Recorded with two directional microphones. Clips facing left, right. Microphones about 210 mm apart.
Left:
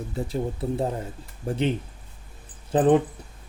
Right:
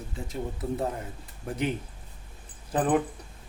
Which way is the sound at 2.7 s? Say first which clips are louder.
Left 7 dB; 30° left (ahead or behind).